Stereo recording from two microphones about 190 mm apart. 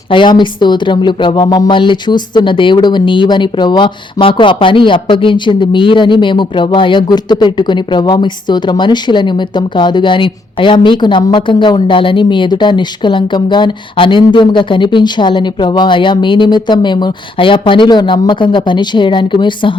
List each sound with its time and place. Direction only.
0.1 s speech: 25° left (ahead or behind)